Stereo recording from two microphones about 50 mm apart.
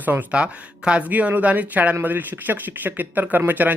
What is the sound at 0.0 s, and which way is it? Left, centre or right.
Speech, right.